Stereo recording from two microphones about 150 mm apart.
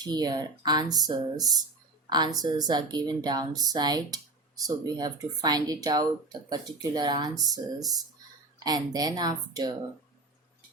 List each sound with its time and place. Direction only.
0.0 s a woman's voice: 25° right (ahead or behind)